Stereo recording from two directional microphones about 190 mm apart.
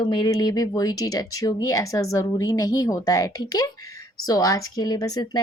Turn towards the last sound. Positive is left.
turn(degrees=20)  # may be behind; listen again after turning